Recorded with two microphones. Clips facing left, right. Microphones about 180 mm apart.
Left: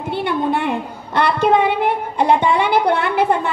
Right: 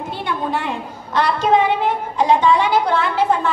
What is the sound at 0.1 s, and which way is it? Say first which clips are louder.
A woman's voice: left 5 dB; 60° left (ahead or behind).